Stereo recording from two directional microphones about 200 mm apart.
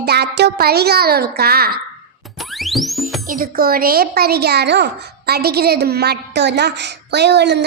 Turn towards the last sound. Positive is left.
turn(degrees=-55)  # may be behind; listen again after turning